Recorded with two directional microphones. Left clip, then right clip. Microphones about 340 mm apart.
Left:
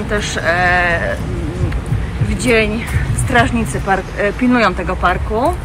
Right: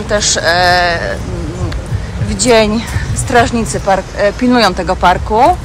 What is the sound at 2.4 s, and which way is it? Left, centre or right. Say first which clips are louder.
Speech: right 5 dB; centre.